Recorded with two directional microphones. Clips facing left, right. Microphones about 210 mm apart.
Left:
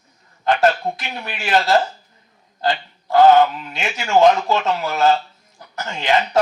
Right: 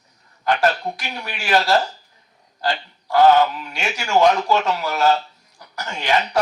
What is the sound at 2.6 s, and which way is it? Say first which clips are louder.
Speech: left 3 dB; 20° left (ahead or behind).